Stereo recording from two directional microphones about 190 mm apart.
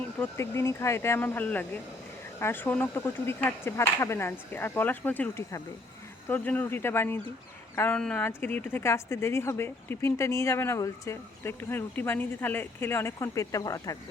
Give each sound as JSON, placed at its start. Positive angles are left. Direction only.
{"t": 0.2, "sound": "speech", "side_deg": 15}